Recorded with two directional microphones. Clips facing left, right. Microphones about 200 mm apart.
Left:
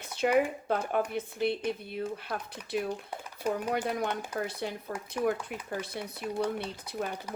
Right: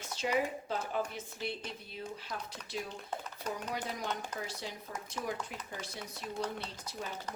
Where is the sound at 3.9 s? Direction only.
55° left (ahead or behind).